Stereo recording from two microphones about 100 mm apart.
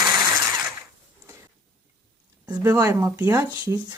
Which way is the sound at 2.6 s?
30° right (ahead or behind).